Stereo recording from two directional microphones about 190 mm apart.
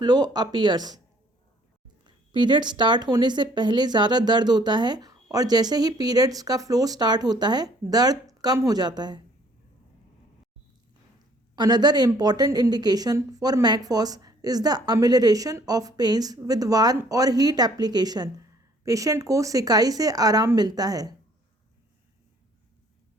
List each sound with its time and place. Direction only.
0.0 s a woman's voice: 20° right (ahead or behind)
2.0 s a woman's voice: 25° right (ahead or behind)
11.5 s a woman's voice: 20° right (ahead or behind)